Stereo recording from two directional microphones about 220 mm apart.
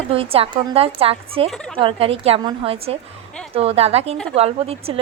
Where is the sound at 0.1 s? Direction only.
25° right (ahead or behind).